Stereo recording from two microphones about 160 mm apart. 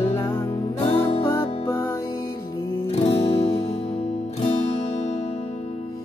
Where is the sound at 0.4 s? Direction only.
35° left (ahead or behind).